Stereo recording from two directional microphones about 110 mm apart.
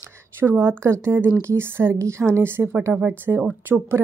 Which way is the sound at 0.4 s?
20° right (ahead or behind).